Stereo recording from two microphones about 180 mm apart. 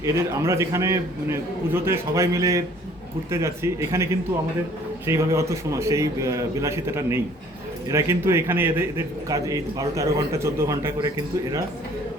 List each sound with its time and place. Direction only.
0.0 s a man's voice: 15° right (ahead or behind)